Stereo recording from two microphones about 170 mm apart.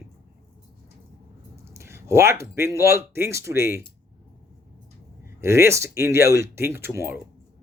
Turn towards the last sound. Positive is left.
turn(degrees=-15)  # may be behind; listen again after turning